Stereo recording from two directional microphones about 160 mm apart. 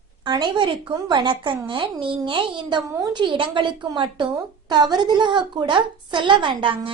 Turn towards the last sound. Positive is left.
turn(degrees=-30)  # may be behind; listen again after turning